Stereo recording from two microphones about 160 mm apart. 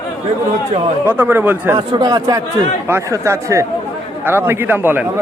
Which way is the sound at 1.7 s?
25° right (ahead or behind).